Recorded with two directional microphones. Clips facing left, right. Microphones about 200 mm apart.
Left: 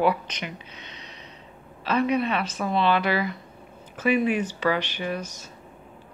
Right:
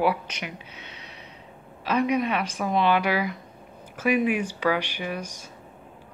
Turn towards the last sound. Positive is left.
turn(degrees=-10)  # may be behind; listen again after turning